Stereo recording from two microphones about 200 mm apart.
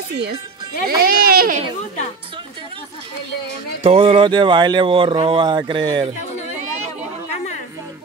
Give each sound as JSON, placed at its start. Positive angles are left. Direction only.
{"t": 0.8, "sound": "speech", "side_deg": -50}
{"t": 3.8, "sound": "speech", "side_deg": -25}